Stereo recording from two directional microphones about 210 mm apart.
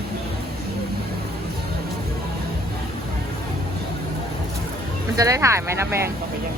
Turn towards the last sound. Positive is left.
turn(degrees=-10)  # may be behind; listen again after turning